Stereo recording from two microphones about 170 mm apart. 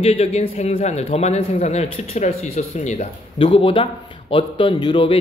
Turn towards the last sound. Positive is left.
turn(degrees=30)  # may be behind; listen again after turning